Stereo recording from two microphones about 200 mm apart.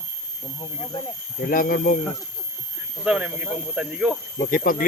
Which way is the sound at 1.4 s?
45° left (ahead or behind).